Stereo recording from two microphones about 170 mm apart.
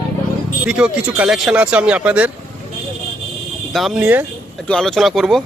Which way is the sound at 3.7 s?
5° right (ahead or behind).